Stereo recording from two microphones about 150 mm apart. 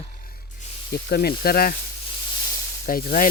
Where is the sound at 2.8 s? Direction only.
75° left (ahead or behind).